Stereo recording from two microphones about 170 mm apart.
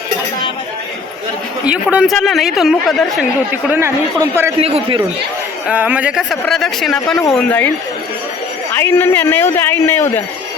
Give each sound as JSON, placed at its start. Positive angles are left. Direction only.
{"t": 1.6, "sound": "speech", "side_deg": -5}
{"t": 3.5, "sound": "speech", "side_deg": -15}
{"t": 4.6, "sound": "a man's voice", "side_deg": -35}
{"t": 5.6, "sound": "speech", "side_deg": -10}
{"t": 8.7, "sound": "a man's voice", "side_deg": 15}